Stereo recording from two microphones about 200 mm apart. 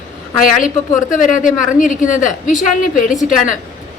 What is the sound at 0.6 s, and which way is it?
A woman's voice, 40° left (ahead or behind).